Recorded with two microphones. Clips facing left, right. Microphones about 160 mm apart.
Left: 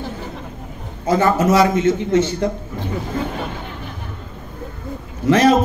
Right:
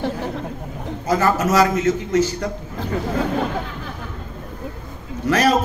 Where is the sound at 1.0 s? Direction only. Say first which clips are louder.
Left 3 dB; 30° left (ahead or behind).